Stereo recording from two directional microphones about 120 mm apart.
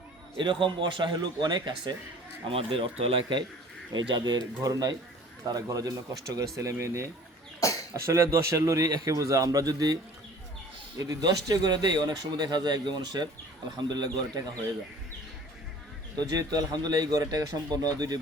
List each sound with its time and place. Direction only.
0.3 s speech: 40° right (ahead or behind)
2.5 s a man's voice: 50° right (ahead or behind); by 7.1 s 25° right (ahead or behind)
7.6 s speech: 25° left (ahead or behind)
8.0 s a man's voice: 25° right (ahead or behind)
16.1 s speech: 30° right (ahead or behind)